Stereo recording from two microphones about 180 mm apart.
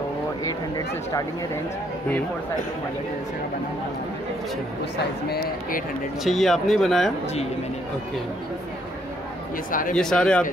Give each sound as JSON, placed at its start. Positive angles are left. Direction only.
{"t": 0.5, "sound": "speech", "side_deg": 20}
{"t": 5.3, "sound": "speech", "side_deg": 50}
{"t": 6.2, "sound": "speech", "side_deg": 0}
{"t": 9.7, "sound": "speech", "side_deg": 50}
{"t": 9.9, "sound": "speech", "side_deg": 5}